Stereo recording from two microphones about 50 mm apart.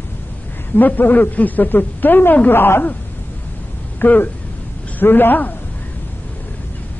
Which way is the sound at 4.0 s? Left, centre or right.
Left.